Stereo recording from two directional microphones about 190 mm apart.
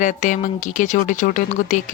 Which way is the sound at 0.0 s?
40° left (ahead or behind).